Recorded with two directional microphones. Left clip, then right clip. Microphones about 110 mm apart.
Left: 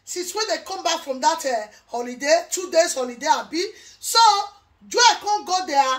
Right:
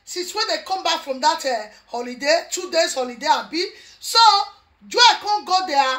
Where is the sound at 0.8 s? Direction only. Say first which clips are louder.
Even; 40° left (ahead or behind).